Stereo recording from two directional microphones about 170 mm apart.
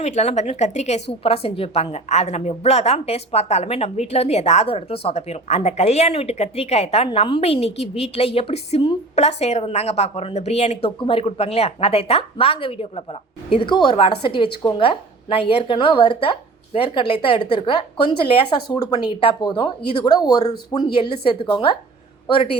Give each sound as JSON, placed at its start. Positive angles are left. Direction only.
{"t": 0.0, "sound": "a woman's voice", "side_deg": 40}